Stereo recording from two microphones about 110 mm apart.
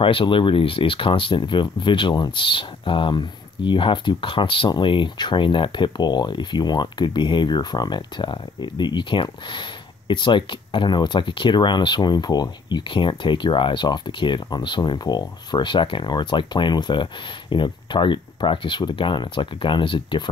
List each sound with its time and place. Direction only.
0.0 s speech: 50° left (ahead or behind)